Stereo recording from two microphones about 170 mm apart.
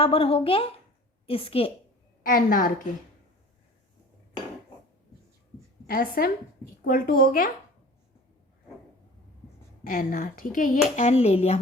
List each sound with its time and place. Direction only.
0.0 s a woman's voice: 35° left (ahead or behind)
2.2 s speech: 55° left (ahead or behind)
5.9 s speech: 60° left (ahead or behind)
9.8 s speech: 55° left (ahead or behind); by 11.6 s 35° left (ahead or behind)